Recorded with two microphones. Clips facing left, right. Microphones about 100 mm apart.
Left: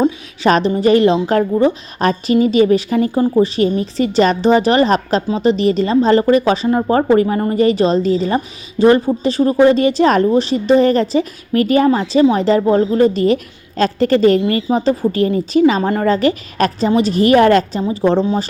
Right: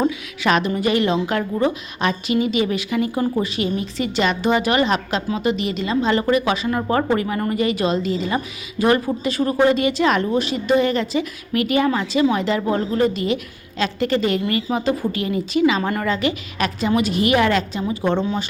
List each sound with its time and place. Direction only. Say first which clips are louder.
0.4 s a woman's voice: left 6 dB; 35° left (ahead or behind)